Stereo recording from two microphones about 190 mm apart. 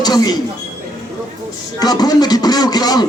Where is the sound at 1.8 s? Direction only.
20° left (ahead or behind).